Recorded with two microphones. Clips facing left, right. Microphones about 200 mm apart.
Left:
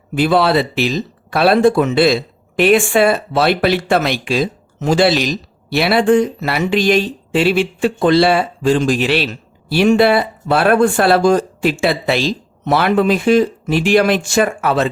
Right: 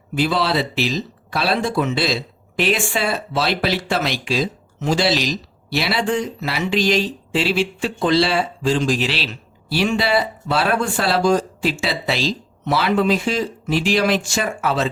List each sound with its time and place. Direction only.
0.2 s speech: 55° left (ahead or behind)